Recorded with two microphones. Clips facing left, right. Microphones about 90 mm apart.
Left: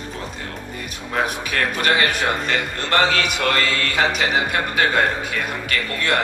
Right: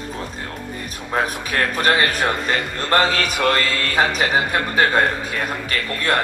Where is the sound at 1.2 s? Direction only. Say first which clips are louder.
Right 1 dB; 35° right (ahead or behind).